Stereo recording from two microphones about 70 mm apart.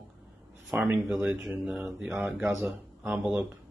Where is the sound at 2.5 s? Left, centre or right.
Centre.